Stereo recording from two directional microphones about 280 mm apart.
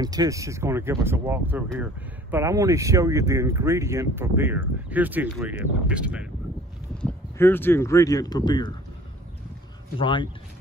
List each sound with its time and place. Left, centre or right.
0.0 s speech: centre
9.9 s speech: centre